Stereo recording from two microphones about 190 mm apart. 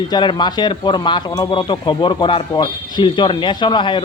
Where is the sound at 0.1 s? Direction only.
25° left (ahead or behind).